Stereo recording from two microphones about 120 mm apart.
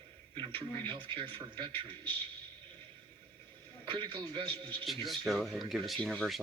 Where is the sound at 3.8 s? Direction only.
45° right (ahead or behind).